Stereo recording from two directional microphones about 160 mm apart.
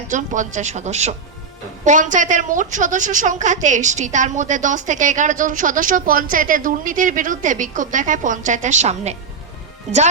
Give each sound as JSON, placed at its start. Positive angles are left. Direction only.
{"t": 0.1, "sound": "a woman's voice", "side_deg": -50}